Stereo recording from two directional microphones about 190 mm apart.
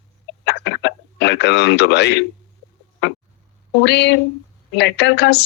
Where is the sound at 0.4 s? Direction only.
65° left (ahead or behind).